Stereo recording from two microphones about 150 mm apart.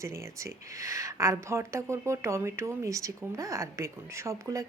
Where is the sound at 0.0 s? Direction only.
20° right (ahead or behind).